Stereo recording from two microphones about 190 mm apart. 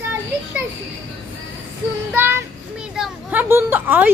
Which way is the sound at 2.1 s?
10° right (ahead or behind).